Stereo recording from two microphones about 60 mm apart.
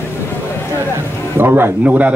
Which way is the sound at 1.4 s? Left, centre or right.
Right.